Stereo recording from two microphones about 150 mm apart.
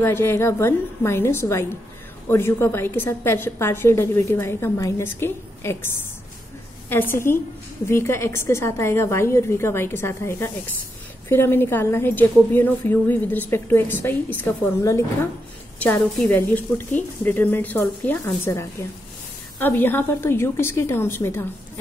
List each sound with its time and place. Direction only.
0.0 s a woman's voice: 15° left (ahead or behind)
6.9 s a woman's voice: 15° left (ahead or behind)
16.3 s a woman's voice: 15° left (ahead or behind)